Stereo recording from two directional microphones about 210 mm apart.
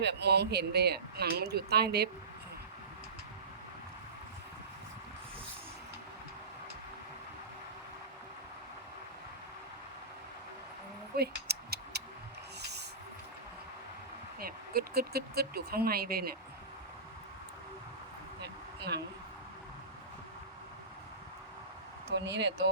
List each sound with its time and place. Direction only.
0.0 s speech: 55° right (ahead or behind)
11.2 s a sound: 50° right (ahead or behind)
14.3 s speech: 45° right (ahead or behind)
18.9 s speech: 50° right (ahead or behind)
22.2 s speech: 55° right (ahead or behind)